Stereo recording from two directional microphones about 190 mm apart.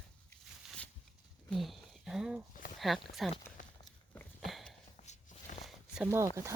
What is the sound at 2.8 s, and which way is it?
Speech, centre (ahead or behind).